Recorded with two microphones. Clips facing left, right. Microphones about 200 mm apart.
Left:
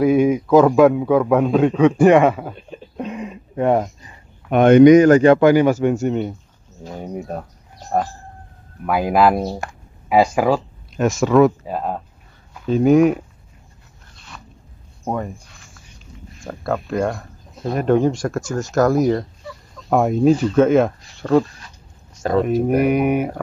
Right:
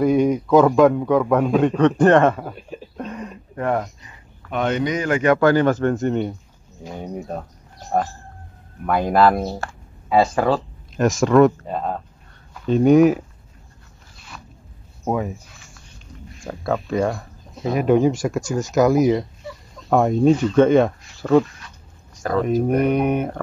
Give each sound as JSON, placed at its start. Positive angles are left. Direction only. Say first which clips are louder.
{"t": 0.0, "sound": "speech", "louder": "left 2 dB", "side_deg": 5}
{"t": 2.5, "sound": "a sound", "louder": "left 1 dB", "side_deg": -5}
{"t": 3.5, "sound": "speech", "louder": "left 5 dB", "side_deg": 30}
{"t": 4.5, "sound": "speech", "louder": "left 13 dB", "side_deg": 55}
{"t": 5.2, "sound": "speech", "louder": "left 4 dB", "side_deg": 20}
{"t": 6.0, "sound": "speech", "louder": "left 1 dB", "side_deg": 0}
{"t": 14.1, "sound": "dog", "louder": "even", "side_deg": -5}
{"t": 15.0, "sound": "speech", "louder": "right 2 dB", "side_deg": -5}
{"t": 21.5, "sound": "writing", "louder": "even", "side_deg": 30}
{"t": 22.4, "sound": "speech", "louder": "left 1 dB", "side_deg": 5}